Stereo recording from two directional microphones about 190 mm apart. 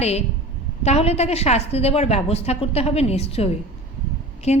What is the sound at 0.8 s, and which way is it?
A woman's voice, 35° left (ahead or behind).